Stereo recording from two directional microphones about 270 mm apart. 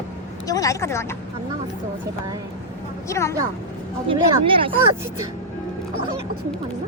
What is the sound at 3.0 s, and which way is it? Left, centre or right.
Speech, centre.